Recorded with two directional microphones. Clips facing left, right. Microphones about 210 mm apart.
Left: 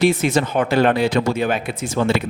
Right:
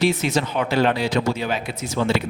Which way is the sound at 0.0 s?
50° left (ahead or behind).